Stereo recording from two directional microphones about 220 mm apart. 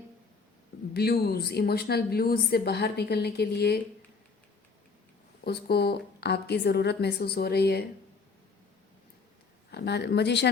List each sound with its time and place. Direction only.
0.9 s a woman's voice: 45° left (ahead or behind)
5.5 s a woman's voice: 45° left (ahead or behind)
9.7 s a woman's voice: 50° left (ahead or behind)